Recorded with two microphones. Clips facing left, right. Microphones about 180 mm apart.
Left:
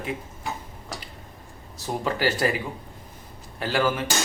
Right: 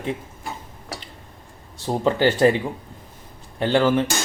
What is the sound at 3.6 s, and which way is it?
Speech, 25° right (ahead or behind).